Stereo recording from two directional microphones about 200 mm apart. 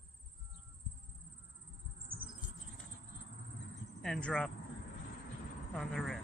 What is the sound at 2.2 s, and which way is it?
Rodents, 45° right (ahead or behind).